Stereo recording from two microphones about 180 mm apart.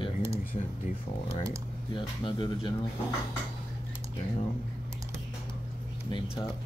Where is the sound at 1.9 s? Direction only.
25° left (ahead or behind).